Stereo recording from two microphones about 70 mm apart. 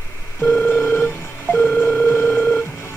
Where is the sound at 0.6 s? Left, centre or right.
Left.